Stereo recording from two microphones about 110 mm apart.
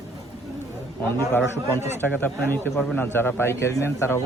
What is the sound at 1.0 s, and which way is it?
A man's voice, 20° left (ahead or behind).